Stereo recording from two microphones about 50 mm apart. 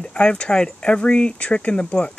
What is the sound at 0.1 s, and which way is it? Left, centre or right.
Speech, left.